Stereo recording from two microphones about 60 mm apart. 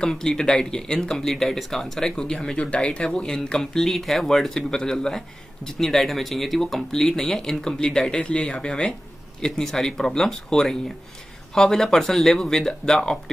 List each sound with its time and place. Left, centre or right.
0.0 s speech: centre